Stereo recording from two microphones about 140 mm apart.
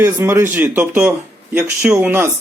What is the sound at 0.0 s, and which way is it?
Speech, 15° right (ahead or behind).